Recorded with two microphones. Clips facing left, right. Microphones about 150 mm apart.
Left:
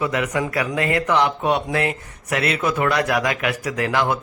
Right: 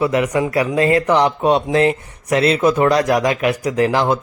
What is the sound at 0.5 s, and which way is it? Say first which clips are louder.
A man's voice: right 8 dB; 30° right (ahead or behind).